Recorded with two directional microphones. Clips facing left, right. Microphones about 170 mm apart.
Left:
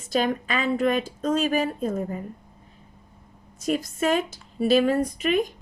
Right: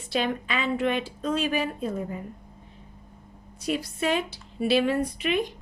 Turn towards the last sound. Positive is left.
turn(degrees=45)  # may be behind; listen again after turning